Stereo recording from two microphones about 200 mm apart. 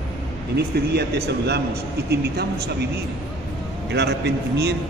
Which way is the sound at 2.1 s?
55° right (ahead or behind).